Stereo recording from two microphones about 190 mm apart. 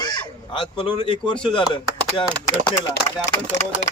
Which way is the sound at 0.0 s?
25° left (ahead or behind).